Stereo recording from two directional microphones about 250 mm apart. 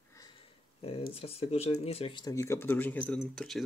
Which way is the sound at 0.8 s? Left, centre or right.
Left.